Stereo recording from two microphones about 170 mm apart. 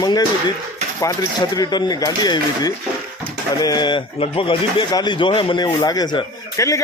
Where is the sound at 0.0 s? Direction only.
25° left (ahead or behind).